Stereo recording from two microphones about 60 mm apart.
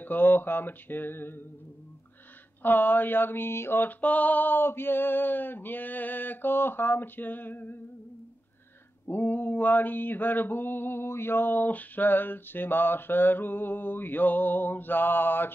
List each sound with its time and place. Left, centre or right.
0.0 s mantra: left
2.6 s mantra: left
9.0 s mantra: left